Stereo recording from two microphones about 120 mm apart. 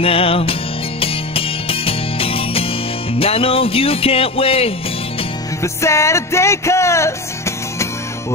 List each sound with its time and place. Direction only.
0.0 s music: 50° left (ahead or behind)
5.6 s music: 25° left (ahead or behind)